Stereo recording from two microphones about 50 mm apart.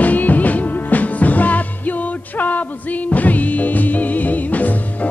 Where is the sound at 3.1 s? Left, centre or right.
Left.